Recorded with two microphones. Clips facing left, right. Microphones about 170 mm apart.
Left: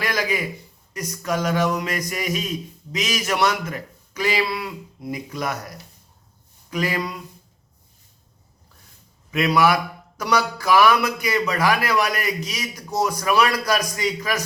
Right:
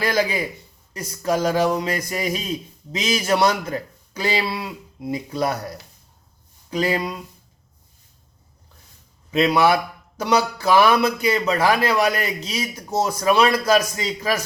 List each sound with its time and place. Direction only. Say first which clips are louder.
0.0 s a man's voice: right 3 dB; 30° right (ahead or behind)
9.3 s speech: right 2 dB; 25° right (ahead or behind)